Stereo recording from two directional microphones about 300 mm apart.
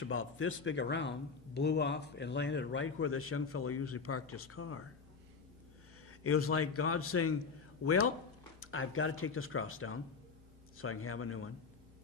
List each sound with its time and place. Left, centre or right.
0.0 s a man's voice: left
6.0 s speech: left